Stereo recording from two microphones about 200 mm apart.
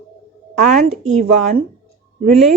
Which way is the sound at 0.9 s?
35° right (ahead or behind).